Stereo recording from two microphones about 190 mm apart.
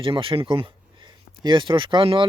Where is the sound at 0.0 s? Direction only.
25° right (ahead or behind).